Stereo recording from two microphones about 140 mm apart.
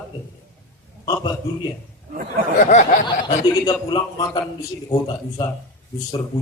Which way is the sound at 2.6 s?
60° left (ahead or behind).